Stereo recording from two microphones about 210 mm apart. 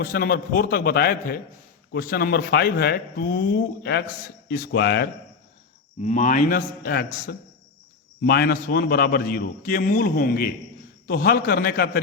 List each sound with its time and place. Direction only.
0.0 s a man's voice: 45° left (ahead or behind)
6.0 s a man's voice: 35° left (ahead or behind)